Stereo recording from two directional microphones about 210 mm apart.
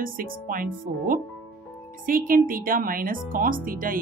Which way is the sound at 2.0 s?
40° right (ahead or behind).